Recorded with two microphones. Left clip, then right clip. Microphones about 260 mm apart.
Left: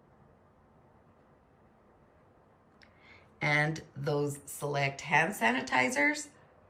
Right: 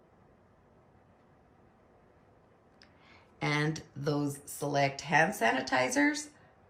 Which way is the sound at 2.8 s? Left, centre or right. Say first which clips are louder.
Left 2 dB; centre.